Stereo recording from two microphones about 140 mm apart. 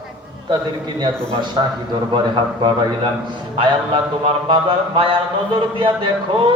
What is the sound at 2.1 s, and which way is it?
Speech, 35° right (ahead or behind).